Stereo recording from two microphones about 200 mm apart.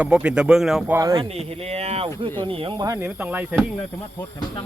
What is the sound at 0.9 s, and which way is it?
Speech, 15° right (ahead or behind).